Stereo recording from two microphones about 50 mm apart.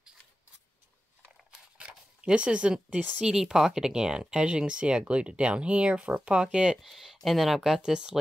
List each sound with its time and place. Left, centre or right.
1.8 s zipper: right
3.2 s speech: centre
6.8 s speech: centre